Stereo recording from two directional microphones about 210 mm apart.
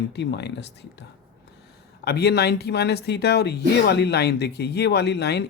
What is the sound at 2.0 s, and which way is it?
Speech, 50° left (ahead or behind).